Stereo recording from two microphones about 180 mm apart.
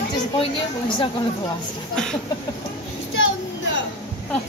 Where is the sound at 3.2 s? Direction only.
90° left.